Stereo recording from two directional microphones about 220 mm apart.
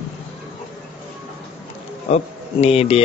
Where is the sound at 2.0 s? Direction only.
30° left (ahead or behind).